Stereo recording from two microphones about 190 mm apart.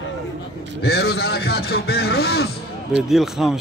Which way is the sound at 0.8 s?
55° left (ahead or behind).